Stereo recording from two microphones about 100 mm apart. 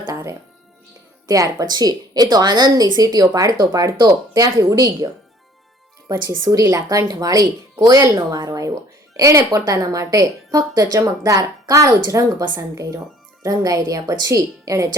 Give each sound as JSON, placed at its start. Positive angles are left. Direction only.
{"t": 0.1, "sound": "music", "side_deg": -30}
{"t": 1.3, "sound": "a woman's voice", "side_deg": -35}
{"t": 6.4, "sound": "a woman's voice", "side_deg": -40}